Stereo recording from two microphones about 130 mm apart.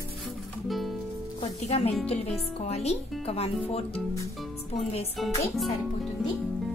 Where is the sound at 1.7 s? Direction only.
55° left (ahead or behind).